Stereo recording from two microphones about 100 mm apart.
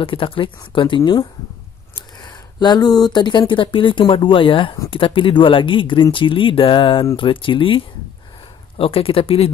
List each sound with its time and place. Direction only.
0.0 s speech: 60° left (ahead or behind)